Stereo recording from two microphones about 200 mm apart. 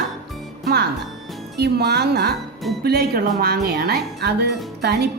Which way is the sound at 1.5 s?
55° right (ahead or behind).